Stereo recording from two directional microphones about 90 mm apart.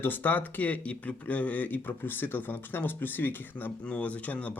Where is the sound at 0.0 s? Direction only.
20° left (ahead or behind).